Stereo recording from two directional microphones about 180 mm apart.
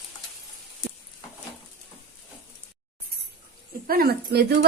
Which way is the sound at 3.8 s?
55° right (ahead or behind).